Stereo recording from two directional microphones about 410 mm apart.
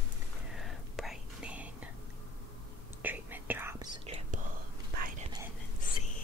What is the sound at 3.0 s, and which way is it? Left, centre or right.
Whispering, centre.